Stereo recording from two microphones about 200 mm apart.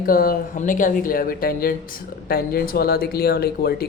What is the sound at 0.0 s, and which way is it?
Speech, 45° left (ahead or behind).